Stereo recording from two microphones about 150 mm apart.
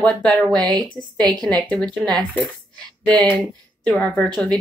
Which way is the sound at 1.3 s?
5° left (ahead or behind).